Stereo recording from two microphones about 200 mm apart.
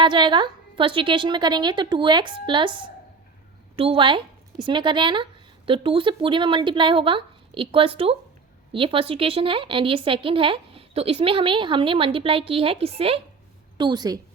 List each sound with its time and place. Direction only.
0.0 s speech: 25° right (ahead or behind)